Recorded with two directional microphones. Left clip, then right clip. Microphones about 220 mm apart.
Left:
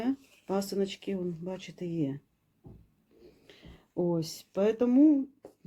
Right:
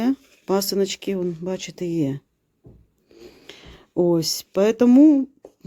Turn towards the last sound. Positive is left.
turn(degrees=-50)  # may be behind; listen again after turning